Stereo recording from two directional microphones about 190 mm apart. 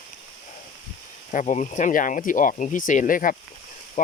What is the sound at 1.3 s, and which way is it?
Speech, 40° left (ahead or behind).